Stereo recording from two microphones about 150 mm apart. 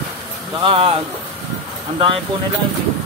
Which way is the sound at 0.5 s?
35° right (ahead or behind).